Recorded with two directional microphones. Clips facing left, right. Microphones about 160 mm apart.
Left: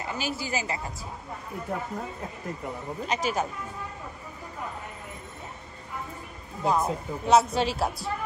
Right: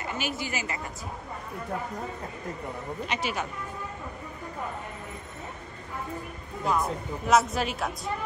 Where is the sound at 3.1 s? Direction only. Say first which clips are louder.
Left 5 dB; 40° left (ahead or behind).